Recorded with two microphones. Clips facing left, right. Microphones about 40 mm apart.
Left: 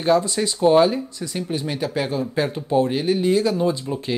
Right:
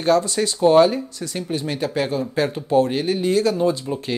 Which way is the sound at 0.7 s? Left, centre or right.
Centre.